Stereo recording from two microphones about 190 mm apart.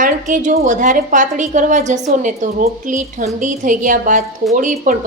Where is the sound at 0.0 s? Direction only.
40° right (ahead or behind).